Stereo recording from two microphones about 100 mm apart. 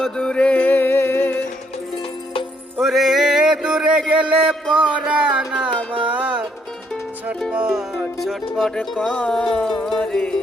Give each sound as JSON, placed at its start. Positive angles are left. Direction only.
{"t": 0.0, "sound": "music", "side_deg": 10}
{"t": 2.8, "sound": "a sound", "side_deg": 0}
{"t": 6.1, "sound": "music", "side_deg": -15}
{"t": 7.5, "sound": "music", "side_deg": -10}